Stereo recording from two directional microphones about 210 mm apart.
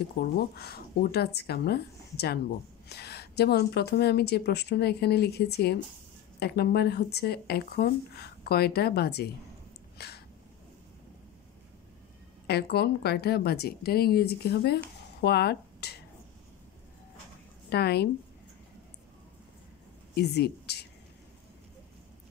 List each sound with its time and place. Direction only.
0.2 s speech: 50° left (ahead or behind)
9.9 s a sound: 50° left (ahead or behind)
12.4 s speech: 50° left (ahead or behind)
17.6 s a woman's voice: 50° left (ahead or behind)
20.2 s speech: 50° left (ahead or behind)